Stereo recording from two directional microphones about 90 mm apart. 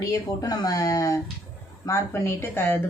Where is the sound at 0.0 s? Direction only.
40° left (ahead or behind).